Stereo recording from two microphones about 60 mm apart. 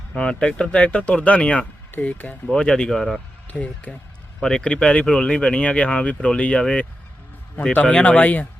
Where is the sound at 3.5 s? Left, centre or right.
Left.